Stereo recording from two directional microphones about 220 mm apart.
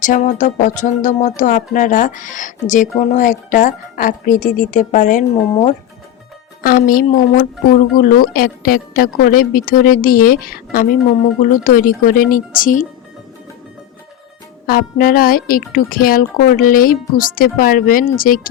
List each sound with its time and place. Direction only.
0.0 s a woman's voice: 35° left (ahead or behind)
14.7 s a woman's voice: 40° left (ahead or behind)